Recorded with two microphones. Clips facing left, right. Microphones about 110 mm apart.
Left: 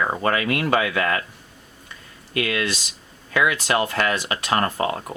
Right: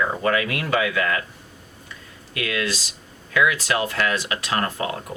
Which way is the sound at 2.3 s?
35° left (ahead or behind).